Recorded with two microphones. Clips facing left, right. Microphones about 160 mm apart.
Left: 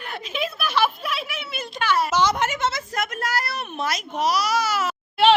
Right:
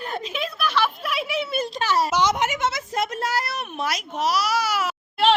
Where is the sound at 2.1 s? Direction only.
15° right (ahead or behind).